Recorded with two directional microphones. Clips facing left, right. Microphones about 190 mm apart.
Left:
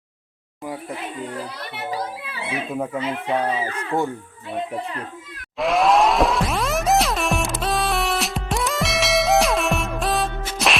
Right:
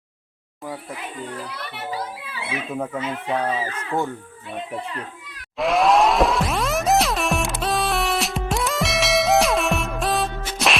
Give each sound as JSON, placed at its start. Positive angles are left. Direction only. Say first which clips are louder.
{"t": 2.7, "sound": "speech", "louder": "left 1 dB", "side_deg": 5}
{"t": 5.5, "sound": "music", "louder": "even", "side_deg": 0}